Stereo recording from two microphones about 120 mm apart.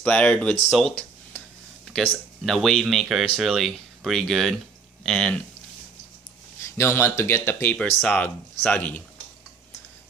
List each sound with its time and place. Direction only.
0.0 s speech: 10° left (ahead or behind)
6.6 s speech: 20° left (ahead or behind)
7.7 s speech: 10° left (ahead or behind)